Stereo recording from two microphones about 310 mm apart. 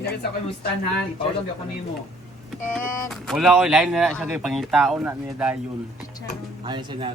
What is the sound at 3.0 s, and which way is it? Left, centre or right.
Speech, centre.